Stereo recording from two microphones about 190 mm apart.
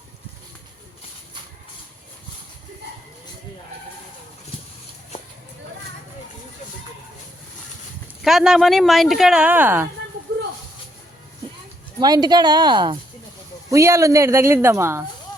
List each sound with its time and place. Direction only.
8.2 s speech: centre (ahead or behind)
11.9 s speech: 20° right (ahead or behind)